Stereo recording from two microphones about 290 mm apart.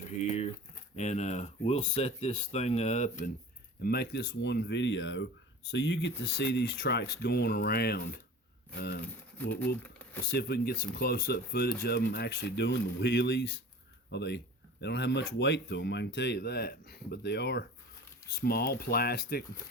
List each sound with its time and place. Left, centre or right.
0.0 s crumpling: left
0.9 s speech: left
10.0 s a sound: centre
10.3 s speech: left